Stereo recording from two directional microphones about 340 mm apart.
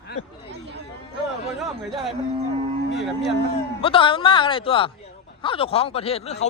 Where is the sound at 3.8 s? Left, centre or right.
Centre.